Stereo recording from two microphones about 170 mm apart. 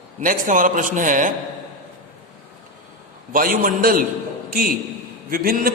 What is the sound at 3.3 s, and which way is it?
A man's voice, 55° right (ahead or behind).